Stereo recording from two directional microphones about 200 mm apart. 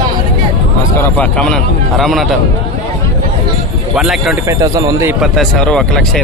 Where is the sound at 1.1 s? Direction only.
5° left (ahead or behind).